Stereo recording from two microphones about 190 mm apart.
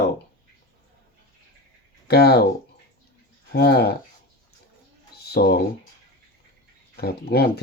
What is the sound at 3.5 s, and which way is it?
Speech, 55° left (ahead or behind).